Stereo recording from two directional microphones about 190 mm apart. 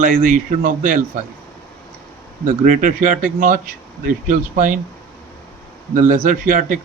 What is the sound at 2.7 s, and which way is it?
Speech, 45° right (ahead or behind).